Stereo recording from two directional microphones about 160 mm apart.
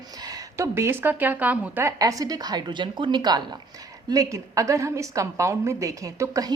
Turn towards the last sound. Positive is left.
turn(degrees=-20)  # may be behind; listen again after turning